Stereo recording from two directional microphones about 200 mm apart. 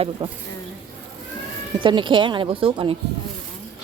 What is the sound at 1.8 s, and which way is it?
Speech, 25° right (ahead or behind).